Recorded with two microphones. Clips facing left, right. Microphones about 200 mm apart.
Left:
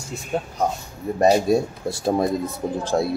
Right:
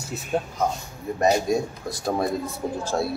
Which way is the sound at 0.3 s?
Centre (ahead or behind).